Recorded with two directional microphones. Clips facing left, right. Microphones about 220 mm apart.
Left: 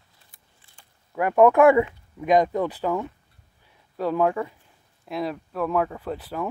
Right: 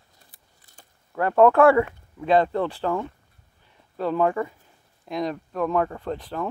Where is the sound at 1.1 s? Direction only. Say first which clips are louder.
Even; 10° left (ahead or behind).